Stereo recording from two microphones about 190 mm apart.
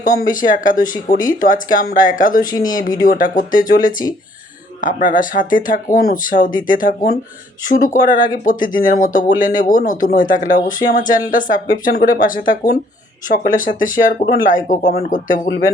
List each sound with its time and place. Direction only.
0.3 s speech: 45° left (ahead or behind)